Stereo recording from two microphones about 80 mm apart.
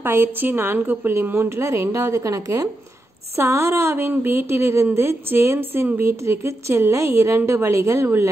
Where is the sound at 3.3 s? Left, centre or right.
Right.